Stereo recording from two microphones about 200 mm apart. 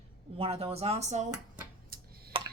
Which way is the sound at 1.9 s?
45° right (ahead or behind).